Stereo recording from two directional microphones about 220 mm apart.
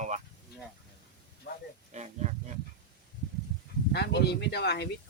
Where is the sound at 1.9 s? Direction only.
30° right (ahead or behind).